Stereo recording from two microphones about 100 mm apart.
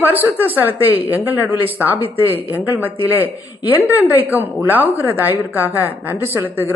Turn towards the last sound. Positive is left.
turn(degrees=-20)  # may be behind; listen again after turning